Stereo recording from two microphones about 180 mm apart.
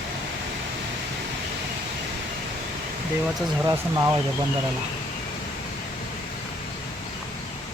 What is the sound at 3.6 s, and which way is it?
Speech, 20° right (ahead or behind).